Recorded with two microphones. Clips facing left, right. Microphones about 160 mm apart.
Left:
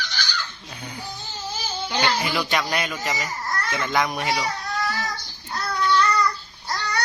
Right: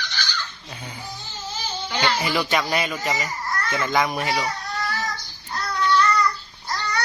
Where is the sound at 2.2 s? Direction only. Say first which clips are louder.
Right 2 dB; centre (ahead or behind).